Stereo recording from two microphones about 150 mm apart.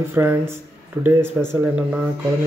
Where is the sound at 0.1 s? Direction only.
15° right (ahead or behind).